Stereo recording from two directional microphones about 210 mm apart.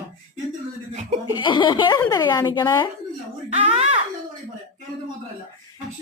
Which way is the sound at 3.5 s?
30° right (ahead or behind).